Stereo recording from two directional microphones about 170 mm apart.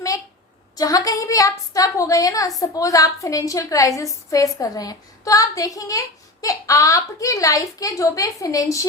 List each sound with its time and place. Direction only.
0.8 s a woman's voice: 20° left (ahead or behind)